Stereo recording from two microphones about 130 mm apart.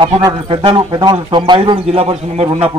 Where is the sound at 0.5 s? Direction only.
40° right (ahead or behind).